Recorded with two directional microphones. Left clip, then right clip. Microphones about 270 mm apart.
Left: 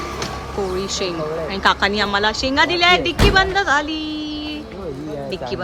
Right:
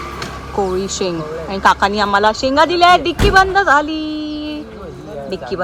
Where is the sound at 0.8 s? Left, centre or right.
Centre.